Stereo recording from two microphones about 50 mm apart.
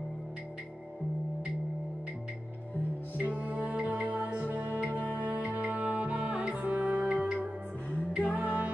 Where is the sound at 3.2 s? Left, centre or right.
Right.